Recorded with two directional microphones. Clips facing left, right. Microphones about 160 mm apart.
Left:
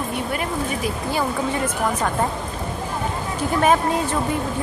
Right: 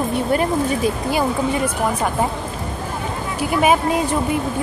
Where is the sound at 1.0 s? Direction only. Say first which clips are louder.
Right 1 dB; 15° right (ahead or behind).